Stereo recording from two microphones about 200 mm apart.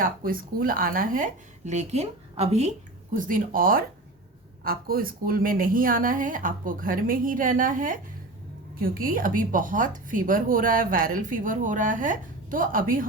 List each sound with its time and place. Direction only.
0.0 s a woman's voice: 45° right (ahead or behind)